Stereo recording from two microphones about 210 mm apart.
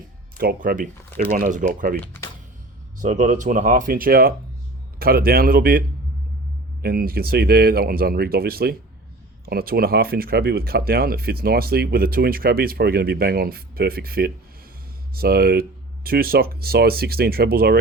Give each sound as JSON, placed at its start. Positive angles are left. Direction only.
{"t": 0.3, "sound": "speech", "side_deg": -45}
{"t": 3.0, "sound": "speech", "side_deg": -35}
{"t": 6.8, "sound": "speech", "side_deg": -45}